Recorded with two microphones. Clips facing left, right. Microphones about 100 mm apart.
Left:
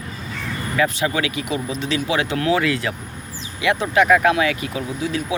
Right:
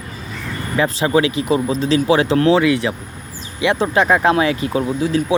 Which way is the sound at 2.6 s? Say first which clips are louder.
Right 5 dB; 20° right (ahead or behind).